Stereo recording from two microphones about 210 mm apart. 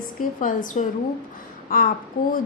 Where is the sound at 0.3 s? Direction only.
40° left (ahead or behind).